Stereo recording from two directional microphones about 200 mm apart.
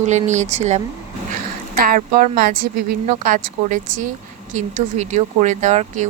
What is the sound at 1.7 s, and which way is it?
Speech, 45° right (ahead or behind).